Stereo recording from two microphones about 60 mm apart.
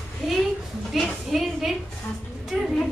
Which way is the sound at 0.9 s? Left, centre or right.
Centre.